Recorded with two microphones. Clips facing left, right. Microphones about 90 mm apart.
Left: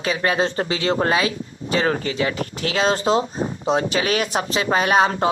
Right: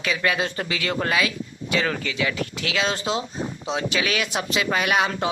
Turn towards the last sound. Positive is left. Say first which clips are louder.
# left 5 dB
turn(degrees=35)  # may be behind; listen again after turning